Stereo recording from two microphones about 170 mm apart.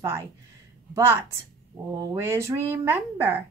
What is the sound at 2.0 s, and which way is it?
A woman's voice, 15° right (ahead or behind).